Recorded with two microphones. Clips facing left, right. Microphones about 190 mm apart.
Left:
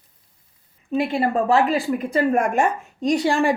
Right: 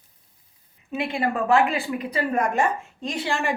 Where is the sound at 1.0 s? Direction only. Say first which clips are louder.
Left 4 dB; 35° left (ahead or behind).